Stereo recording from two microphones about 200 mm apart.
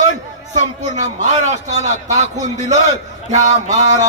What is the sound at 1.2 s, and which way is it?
Speech, 35° right (ahead or behind).